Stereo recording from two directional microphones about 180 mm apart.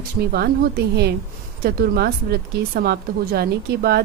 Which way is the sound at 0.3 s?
60° right (ahead or behind).